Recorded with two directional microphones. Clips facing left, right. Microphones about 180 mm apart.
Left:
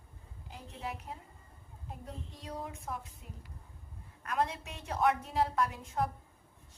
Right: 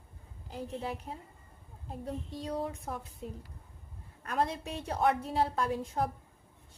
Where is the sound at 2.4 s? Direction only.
35° right (ahead or behind).